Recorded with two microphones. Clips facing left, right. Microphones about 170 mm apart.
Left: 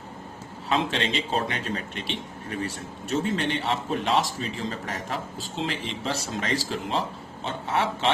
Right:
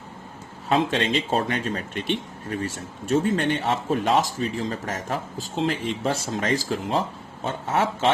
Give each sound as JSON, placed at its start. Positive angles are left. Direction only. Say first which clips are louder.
{"t": 0.7, "sound": "speech", "louder": "right 4 dB", "side_deg": -45}